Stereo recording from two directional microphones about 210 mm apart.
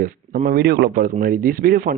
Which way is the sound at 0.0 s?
40° right (ahead or behind).